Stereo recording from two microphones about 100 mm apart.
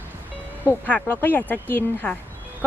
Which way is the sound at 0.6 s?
15° left (ahead or behind).